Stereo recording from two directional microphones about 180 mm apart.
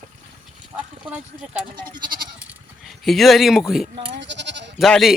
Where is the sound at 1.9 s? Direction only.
50° right (ahead or behind).